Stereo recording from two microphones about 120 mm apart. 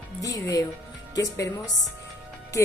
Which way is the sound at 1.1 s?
30° left (ahead or behind).